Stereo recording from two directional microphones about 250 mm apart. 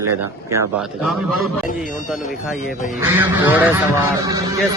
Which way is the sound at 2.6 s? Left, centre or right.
Left.